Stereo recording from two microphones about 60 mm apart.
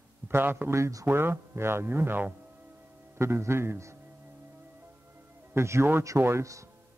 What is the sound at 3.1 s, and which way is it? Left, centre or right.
Speech, right.